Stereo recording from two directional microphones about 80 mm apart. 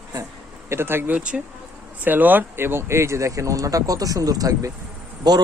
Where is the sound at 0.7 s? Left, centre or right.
Right.